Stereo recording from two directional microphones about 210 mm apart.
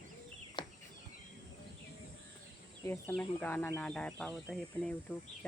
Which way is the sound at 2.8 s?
10° left (ahead or behind).